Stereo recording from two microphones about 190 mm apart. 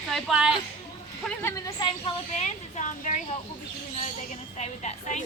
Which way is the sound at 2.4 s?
40° left (ahead or behind).